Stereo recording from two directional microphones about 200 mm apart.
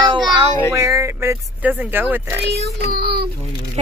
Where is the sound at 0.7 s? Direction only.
15° right (ahead or behind).